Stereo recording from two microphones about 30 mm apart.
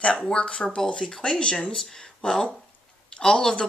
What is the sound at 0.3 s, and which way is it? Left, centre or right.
Speech, left.